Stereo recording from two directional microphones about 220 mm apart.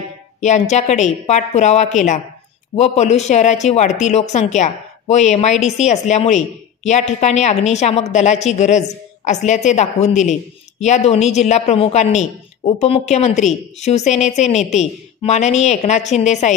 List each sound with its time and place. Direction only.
0.4 s a man's voice: 30° left (ahead or behind)